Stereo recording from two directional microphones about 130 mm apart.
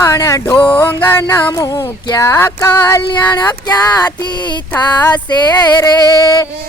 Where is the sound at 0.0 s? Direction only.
25° left (ahead or behind).